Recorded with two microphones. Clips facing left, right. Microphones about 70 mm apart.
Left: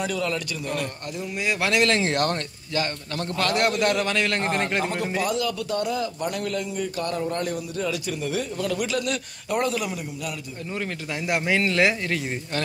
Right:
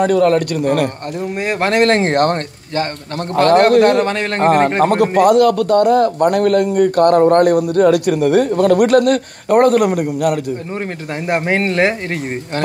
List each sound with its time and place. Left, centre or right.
0.0 s a man's voice: right
11.2 s speech: right